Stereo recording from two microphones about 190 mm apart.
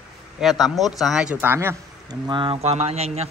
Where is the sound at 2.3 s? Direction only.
25° right (ahead or behind).